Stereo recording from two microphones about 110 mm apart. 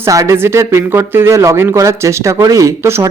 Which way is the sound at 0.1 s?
25° right (ahead or behind).